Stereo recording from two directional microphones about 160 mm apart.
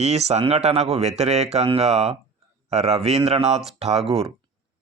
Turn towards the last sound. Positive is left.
turn(degrees=-40)  # may be behind; listen again after turning